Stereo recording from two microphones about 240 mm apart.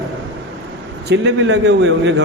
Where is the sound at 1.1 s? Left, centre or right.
Right.